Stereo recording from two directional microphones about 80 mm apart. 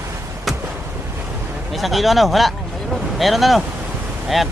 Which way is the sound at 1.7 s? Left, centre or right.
Centre.